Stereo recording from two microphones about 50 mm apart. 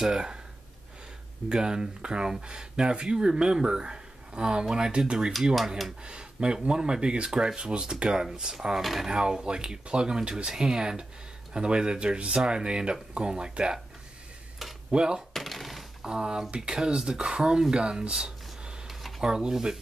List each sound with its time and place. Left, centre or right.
0.0 s speech: centre
1.5 s speech: centre
14.9 s speech: centre
15.3 s a sound: centre
16.0 s speech: centre
18.9 s a sound: centre
19.3 s speech: centre